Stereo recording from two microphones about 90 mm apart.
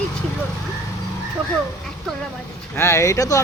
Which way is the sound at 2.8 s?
30° left (ahead or behind).